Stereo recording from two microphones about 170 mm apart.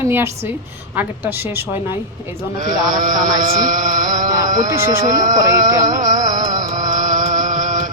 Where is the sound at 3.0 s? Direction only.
50° right (ahead or behind).